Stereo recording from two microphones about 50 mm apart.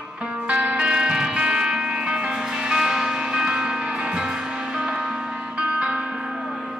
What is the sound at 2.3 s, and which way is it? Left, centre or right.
Music, centre.